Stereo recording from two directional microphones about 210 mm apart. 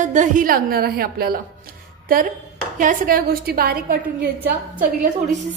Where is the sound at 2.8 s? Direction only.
40° right (ahead or behind).